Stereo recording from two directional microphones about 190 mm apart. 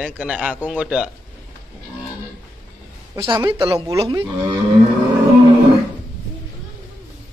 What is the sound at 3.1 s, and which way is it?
Speech, 25° right (ahead or behind).